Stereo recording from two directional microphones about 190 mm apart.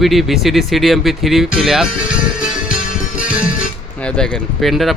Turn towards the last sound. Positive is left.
turn(degrees=0)  # may be behind; listen again after turning